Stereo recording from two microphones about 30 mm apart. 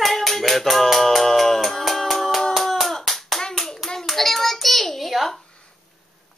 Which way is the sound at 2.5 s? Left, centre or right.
Centre.